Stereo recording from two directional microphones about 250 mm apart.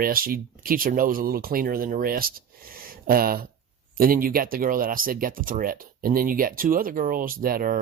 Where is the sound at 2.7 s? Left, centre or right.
Right.